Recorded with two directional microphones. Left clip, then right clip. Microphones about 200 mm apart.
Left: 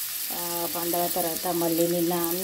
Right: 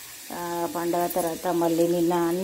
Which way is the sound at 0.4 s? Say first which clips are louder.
Right 4 dB; 15° right (ahead or behind).